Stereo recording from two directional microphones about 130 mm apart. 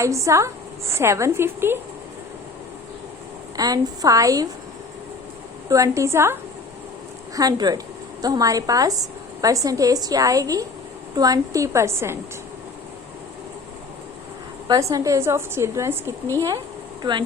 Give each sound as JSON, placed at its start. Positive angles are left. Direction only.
{"t": 0.0, "sound": "a woman's voice", "side_deg": -25}
{"t": 3.6, "sound": "a woman's voice", "side_deg": -30}
{"t": 5.6, "sound": "a woman's voice", "side_deg": -25}
{"t": 7.3, "sound": "a woman's voice", "side_deg": -30}
{"t": 14.7, "sound": "a woman's voice", "side_deg": -25}
{"t": 17.0, "sound": "speech", "side_deg": -35}